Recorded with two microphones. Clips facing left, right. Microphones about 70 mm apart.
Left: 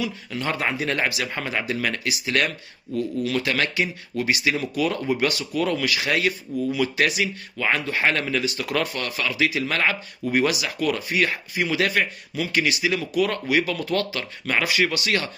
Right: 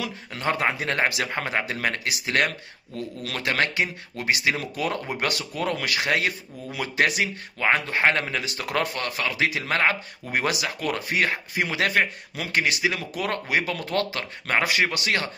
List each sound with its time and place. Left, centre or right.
0.0 s speech: right